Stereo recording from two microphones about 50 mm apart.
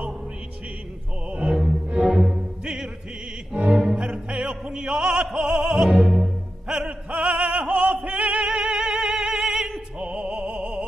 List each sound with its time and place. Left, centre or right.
1.3 s music: right
1.9 s music: centre
3.9 s opera: centre
5.9 s music: centre
7.1 s opera: right
8.0 s music: right